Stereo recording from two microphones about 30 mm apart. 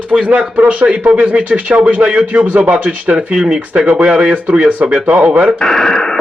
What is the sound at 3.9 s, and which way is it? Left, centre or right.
Speech, right.